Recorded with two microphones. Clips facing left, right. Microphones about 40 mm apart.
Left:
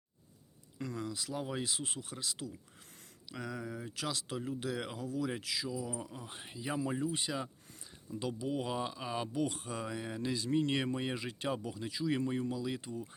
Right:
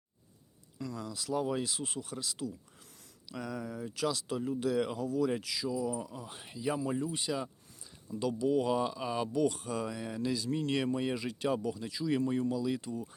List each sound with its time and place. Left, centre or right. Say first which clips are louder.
0.9 s speech: right 5 dB; left
1.8 s speech: right 3 dB; left